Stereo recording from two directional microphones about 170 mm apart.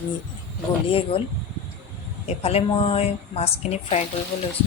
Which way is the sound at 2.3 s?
35° left (ahead or behind).